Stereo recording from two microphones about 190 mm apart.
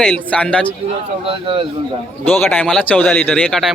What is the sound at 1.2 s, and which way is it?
Speech, 25° right (ahead or behind).